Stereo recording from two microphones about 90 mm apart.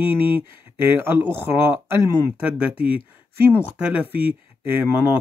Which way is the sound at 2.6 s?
15° right (ahead or behind).